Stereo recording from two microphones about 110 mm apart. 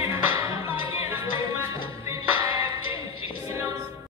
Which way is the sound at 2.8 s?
55° left (ahead or behind).